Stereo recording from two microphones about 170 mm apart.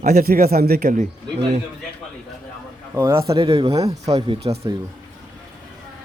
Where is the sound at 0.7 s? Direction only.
45° right (ahead or behind).